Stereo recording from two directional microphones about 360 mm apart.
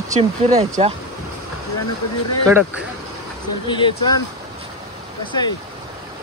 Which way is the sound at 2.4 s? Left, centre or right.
Centre.